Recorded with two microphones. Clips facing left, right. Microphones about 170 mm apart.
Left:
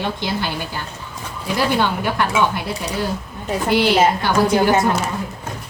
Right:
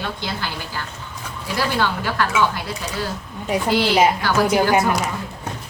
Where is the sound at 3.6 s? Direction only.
20° left (ahead or behind).